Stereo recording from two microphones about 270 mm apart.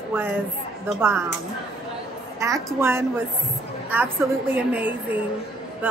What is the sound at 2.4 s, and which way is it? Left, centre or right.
A woman's voice, centre.